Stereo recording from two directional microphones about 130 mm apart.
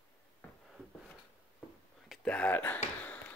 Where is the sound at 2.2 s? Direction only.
10° left (ahead or behind).